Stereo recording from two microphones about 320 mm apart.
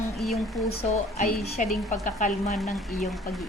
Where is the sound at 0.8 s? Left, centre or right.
Centre.